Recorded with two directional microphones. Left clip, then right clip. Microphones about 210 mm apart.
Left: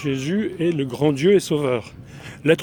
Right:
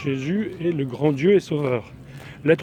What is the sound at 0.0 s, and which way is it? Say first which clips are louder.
Speech: left 2 dB; 50° left (ahead or behind).